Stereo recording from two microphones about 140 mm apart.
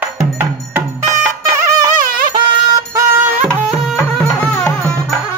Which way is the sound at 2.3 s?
25° right (ahead or behind).